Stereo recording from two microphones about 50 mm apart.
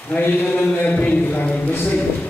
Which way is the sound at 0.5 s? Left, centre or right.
Left.